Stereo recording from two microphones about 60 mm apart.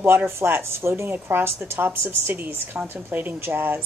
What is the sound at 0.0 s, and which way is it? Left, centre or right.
A woman's voice, right.